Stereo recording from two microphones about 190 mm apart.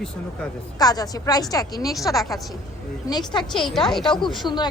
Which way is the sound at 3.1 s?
20° left (ahead or behind).